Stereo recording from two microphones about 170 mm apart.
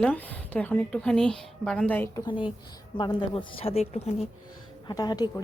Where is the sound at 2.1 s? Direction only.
30° left (ahead or behind).